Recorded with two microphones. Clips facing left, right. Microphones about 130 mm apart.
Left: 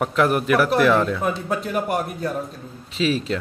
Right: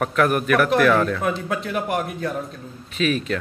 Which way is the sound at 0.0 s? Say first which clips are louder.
Even; 25° left (ahead or behind).